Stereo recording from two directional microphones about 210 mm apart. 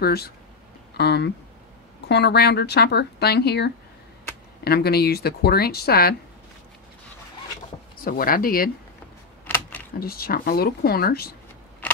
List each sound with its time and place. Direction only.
0.0 s speech: 50° left (ahead or behind)
8.0 s speech: 45° left (ahead or behind)
9.5 s a sound: 10° left (ahead or behind)
9.9 s speech: 45° left (ahead or behind)